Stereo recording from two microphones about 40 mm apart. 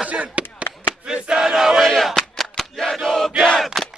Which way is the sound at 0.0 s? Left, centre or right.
Right.